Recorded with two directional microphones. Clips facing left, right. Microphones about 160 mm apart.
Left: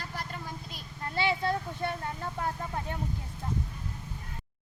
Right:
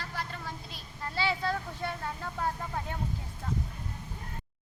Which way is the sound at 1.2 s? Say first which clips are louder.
Left 2 dB; 20° left (ahead or behind).